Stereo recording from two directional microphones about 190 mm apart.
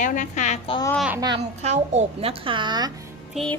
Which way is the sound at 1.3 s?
35° right (ahead or behind).